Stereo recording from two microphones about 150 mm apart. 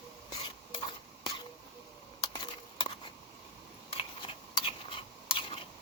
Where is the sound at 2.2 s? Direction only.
30° left (ahead or behind).